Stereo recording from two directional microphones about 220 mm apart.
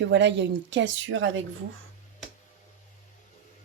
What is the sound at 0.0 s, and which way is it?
Speech, 50° right (ahead or behind).